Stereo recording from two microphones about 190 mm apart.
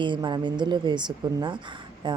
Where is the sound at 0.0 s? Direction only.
25° right (ahead or behind).